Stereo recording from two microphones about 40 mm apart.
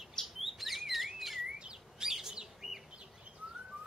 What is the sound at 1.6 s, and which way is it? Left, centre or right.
Bird, right.